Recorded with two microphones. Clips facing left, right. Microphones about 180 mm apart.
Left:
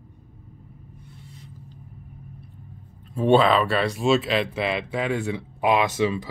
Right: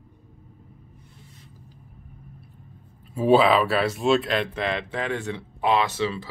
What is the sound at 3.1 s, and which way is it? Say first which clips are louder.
Speech: even; 5° right (ahead or behind).